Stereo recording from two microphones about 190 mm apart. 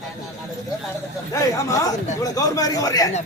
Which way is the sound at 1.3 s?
15° left (ahead or behind).